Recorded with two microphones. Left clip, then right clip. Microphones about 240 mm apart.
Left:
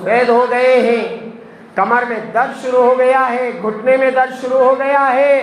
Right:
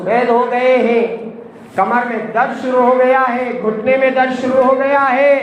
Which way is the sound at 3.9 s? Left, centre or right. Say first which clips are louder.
Left 1 dB; left.